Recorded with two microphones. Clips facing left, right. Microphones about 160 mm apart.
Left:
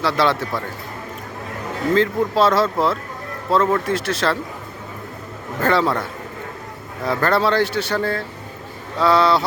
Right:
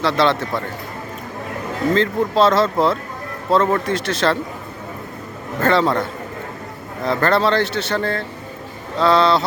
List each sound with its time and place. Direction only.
0.0 s speech: 10° left (ahead or behind)
2.0 s speech: 10° left (ahead or behind)
5.6 s speech: 5° left (ahead or behind)